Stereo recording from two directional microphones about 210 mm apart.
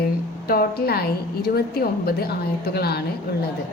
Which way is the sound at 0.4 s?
45° left (ahead or behind).